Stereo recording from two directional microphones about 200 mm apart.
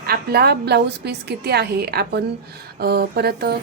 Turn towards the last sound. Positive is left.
turn(degrees=-50)  # may be behind; listen again after turning